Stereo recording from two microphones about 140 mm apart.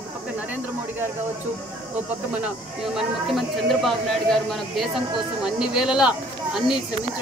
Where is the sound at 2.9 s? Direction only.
Centre (ahead or behind).